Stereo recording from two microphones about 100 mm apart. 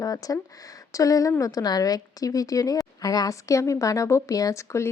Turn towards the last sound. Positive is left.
turn(degrees=30)  # may be behind; listen again after turning